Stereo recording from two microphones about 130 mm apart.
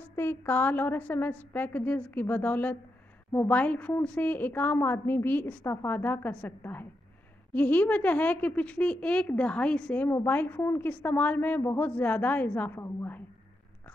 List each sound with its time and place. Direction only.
0.1 s a woman's voice: 15° left (ahead or behind)